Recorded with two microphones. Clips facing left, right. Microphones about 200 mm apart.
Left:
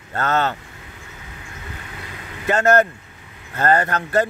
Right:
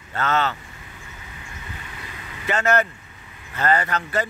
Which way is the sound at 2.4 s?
45° left (ahead or behind).